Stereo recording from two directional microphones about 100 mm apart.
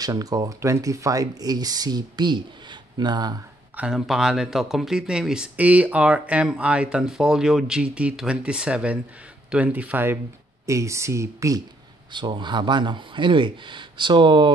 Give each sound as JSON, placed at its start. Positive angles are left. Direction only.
{"t": 0.0, "sound": "speech", "side_deg": -40}
{"t": 3.7, "sound": "speech", "side_deg": -10}
{"t": 10.7, "sound": "speech", "side_deg": -30}
{"t": 12.1, "sound": "speech", "side_deg": -50}